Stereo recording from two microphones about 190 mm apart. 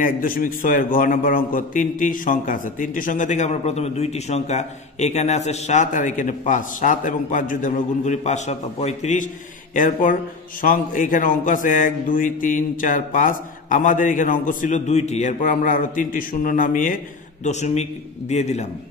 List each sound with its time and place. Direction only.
0.0 s a man's voice: 45° left (ahead or behind)